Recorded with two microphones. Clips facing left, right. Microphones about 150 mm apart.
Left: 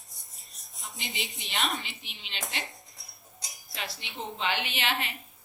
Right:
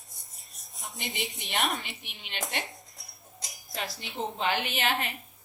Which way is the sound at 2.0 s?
55° right (ahead or behind).